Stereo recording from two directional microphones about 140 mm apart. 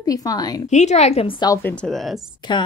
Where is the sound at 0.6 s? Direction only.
55° left (ahead or behind).